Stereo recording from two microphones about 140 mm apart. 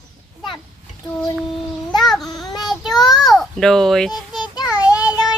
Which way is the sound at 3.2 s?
Centre (ahead or behind).